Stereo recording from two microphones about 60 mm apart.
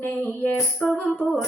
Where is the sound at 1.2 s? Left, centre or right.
Left.